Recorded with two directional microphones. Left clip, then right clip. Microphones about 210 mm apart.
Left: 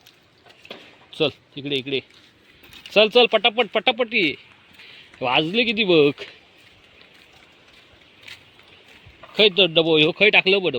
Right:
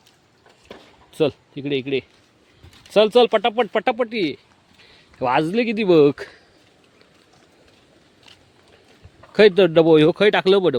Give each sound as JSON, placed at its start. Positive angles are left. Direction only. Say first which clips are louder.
{"t": 1.1, "sound": "speech", "louder": "right 2 dB", "side_deg": -25}
{"t": 5.2, "sound": "speech", "louder": "right 1 dB", "side_deg": -20}
{"t": 5.5, "sound": "speech", "louder": "left 1 dB", "side_deg": -55}
{"t": 5.9, "sound": "speech", "louder": "right 4 dB", "side_deg": -25}
{"t": 9.6, "sound": "speech", "louder": "right 3 dB", "side_deg": -40}